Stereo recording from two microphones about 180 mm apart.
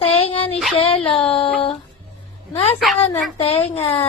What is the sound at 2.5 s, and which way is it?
A woman's voice, 35° left (ahead or behind).